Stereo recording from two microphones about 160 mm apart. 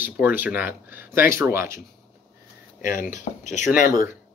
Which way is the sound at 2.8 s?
55° left (ahead or behind).